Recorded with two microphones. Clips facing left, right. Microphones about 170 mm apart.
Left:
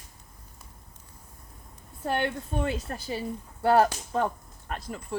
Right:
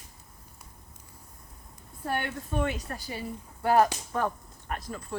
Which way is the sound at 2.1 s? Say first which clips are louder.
Left 3 dB; 25° left (ahead or behind).